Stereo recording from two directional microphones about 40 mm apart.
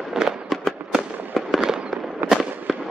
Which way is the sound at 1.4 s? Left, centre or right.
Centre.